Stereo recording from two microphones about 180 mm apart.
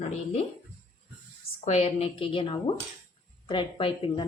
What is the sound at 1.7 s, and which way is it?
A woman's voice, 35° left (ahead or behind).